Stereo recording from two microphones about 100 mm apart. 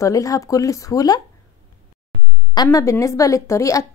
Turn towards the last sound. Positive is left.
turn(degrees=30)  # may be behind; listen again after turning